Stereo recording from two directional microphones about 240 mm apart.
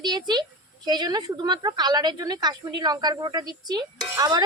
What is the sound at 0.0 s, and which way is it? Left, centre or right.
A woman's voice, centre.